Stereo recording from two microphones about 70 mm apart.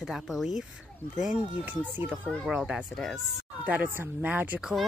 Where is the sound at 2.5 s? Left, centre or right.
Centre.